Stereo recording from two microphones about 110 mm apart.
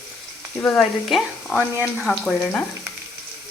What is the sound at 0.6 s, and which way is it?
Speech, 15° left (ahead or behind).